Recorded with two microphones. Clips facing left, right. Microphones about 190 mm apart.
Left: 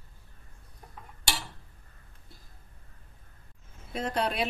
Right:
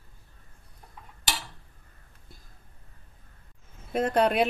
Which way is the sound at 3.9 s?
55° right (ahead or behind).